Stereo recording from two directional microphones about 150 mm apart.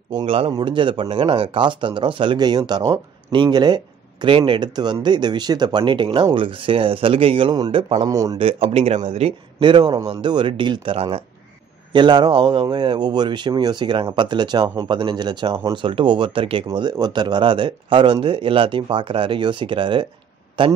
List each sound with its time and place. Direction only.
0.1 s speech: 35° right (ahead or behind)
7.5 s a man's voice: 25° right (ahead or behind)
8.4 s speech: 40° right (ahead or behind)